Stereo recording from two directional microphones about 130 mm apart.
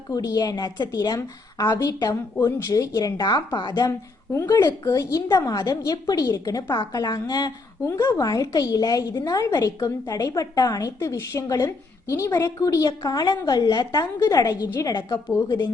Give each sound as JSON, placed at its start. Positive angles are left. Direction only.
{"t": 0.1, "sound": "a woman's voice", "side_deg": 30}